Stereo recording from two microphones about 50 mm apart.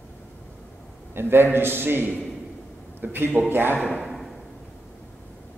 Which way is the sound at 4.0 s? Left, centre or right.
Centre.